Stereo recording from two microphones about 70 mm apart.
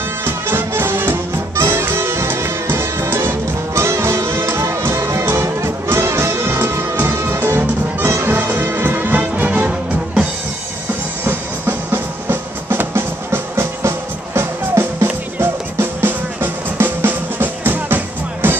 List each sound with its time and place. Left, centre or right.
0.2 s music: right
11.2 s music: right